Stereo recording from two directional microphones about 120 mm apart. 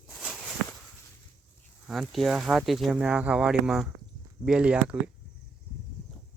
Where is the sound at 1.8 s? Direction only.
5° right (ahead or behind).